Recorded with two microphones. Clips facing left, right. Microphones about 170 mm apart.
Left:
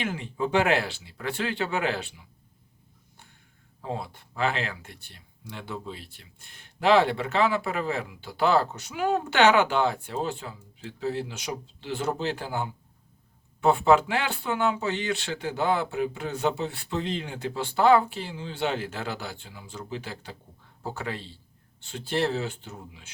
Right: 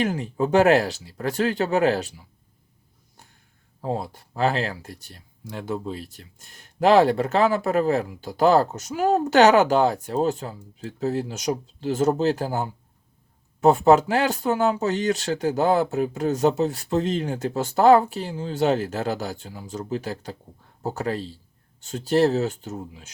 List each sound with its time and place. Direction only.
0.0 s speech: 40° right (ahead or behind)
3.8 s speech: 40° right (ahead or behind)